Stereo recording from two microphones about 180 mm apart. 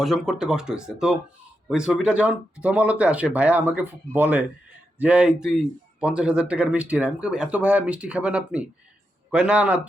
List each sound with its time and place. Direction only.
0.0 s speech: centre (ahead or behind)